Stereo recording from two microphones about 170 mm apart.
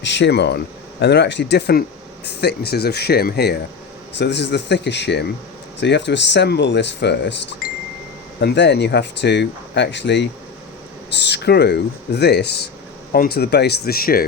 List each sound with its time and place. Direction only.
0.0 s speech: 90° left; by 3.6 s 70° left (ahead or behind)
4.2 s speech: 90° left
8.4 s speech: 85° left; by 14.3 s 60° left (ahead or behind)